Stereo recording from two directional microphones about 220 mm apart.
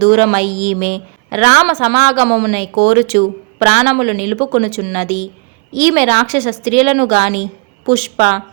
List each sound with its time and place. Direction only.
0.0 s a woman's voice: 35° right (ahead or behind)